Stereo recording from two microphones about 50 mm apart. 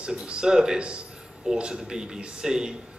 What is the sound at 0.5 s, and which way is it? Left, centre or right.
A man's voice, centre.